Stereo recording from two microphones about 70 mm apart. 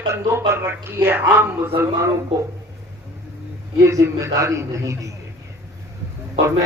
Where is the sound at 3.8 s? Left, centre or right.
Right.